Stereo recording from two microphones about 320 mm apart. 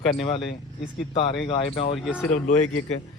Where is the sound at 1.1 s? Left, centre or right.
Centre.